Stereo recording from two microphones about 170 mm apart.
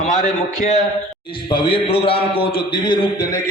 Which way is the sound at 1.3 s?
30° left (ahead or behind).